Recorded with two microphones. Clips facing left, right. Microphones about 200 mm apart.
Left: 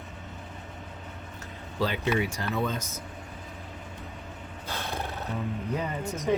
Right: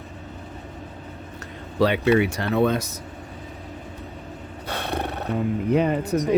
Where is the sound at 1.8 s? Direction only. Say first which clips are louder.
Right 9 dB; 70° right (ahead or behind).